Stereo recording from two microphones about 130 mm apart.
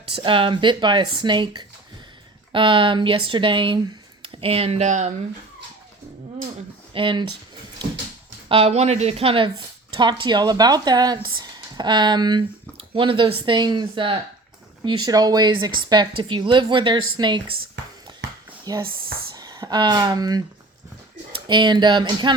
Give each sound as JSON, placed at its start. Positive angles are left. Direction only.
{"t": 0.2, "sound": "speech", "side_deg": -40}
{"t": 4.9, "sound": "speech", "side_deg": -65}
{"t": 6.9, "sound": "speech", "side_deg": -40}
{"t": 8.4, "sound": "speech", "side_deg": -50}
{"t": 18.6, "sound": "speech", "side_deg": -30}